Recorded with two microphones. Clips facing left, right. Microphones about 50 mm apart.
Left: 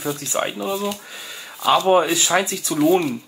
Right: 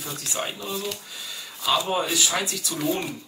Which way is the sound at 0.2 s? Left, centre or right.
Left.